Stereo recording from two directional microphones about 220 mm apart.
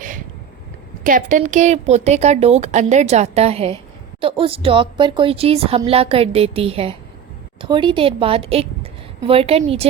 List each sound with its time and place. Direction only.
1.0 s a woman's voice: 35° right (ahead or behind)